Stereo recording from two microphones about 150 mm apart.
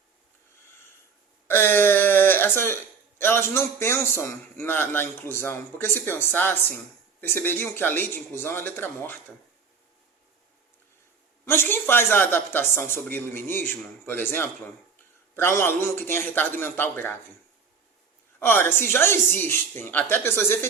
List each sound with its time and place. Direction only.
1.5 s a sound: 15° left (ahead or behind)
3.2 s a man's voice: 15° left (ahead or behind)
11.4 s a man's voice: 15° left (ahead or behind)
18.3 s a man's voice: 15° left (ahead or behind)